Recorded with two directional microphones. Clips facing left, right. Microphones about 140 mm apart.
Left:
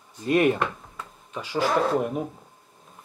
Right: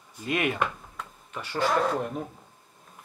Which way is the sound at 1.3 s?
10° left (ahead or behind).